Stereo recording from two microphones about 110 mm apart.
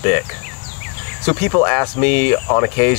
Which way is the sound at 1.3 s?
25° left (ahead or behind).